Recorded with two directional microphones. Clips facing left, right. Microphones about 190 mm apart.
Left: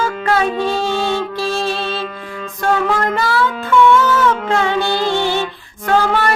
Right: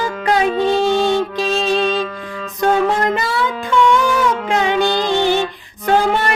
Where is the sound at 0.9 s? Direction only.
15° right (ahead or behind).